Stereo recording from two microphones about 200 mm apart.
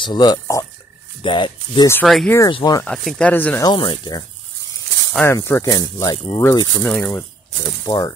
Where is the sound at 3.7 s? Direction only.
25° left (ahead or behind).